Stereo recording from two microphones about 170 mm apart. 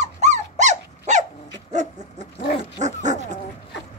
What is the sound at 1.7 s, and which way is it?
Chicken, 45° right (ahead or behind).